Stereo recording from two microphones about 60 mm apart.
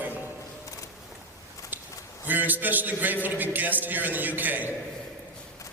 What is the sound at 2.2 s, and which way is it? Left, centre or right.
A man's voice, right.